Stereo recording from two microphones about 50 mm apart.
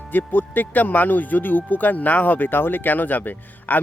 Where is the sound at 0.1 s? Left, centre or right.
Left.